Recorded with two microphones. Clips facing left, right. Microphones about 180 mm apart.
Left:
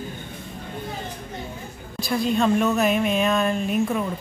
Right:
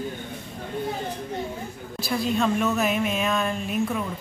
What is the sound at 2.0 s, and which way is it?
Speech, centre (ahead or behind).